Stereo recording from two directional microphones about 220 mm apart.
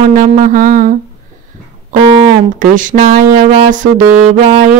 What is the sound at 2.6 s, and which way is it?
Speech, 35° right (ahead or behind).